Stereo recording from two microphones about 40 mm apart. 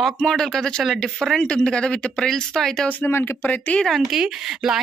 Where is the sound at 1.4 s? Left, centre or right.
Left.